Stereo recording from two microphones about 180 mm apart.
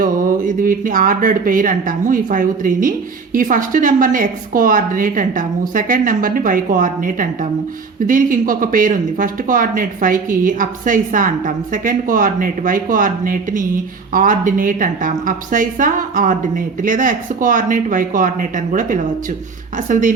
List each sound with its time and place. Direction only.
0.0 s speech: 50° right (ahead or behind)